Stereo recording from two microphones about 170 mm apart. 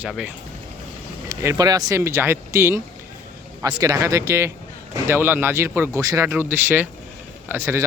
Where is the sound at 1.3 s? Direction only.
20° right (ahead or behind).